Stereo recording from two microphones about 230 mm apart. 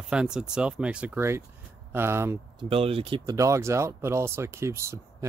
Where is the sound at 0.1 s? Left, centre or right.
Centre.